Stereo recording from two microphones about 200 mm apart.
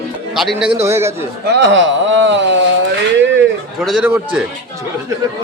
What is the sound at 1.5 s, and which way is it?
Speech, 60° right (ahead or behind).